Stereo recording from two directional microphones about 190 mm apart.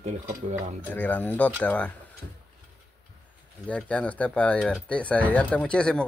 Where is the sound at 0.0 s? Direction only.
35° right (ahead or behind).